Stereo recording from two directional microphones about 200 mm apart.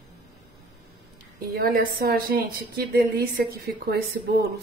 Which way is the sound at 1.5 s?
45° right (ahead or behind).